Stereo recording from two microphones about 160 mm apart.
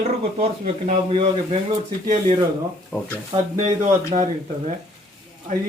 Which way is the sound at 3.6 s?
45° right (ahead or behind).